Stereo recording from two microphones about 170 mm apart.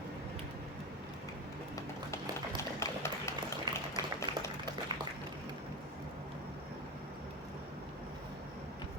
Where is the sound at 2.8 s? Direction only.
15° left (ahead or behind).